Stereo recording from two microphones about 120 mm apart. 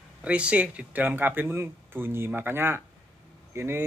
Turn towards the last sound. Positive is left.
turn(degrees=-20)  # may be behind; listen again after turning